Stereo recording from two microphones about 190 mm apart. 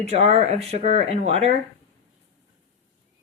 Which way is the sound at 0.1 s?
35° right (ahead or behind).